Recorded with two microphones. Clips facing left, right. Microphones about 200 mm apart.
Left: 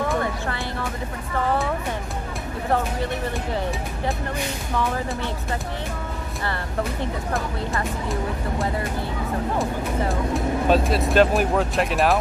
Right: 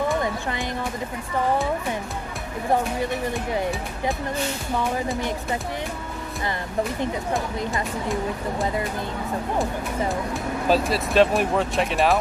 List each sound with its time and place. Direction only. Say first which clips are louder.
0.2 s a sound: even; 15° right (ahead or behind)
4.7 s speech: even; 15° right (ahead or behind)
9.6 s speech: left 1 dB; centre (ahead or behind)